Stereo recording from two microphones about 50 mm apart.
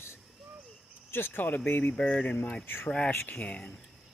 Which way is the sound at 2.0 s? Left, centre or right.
Left.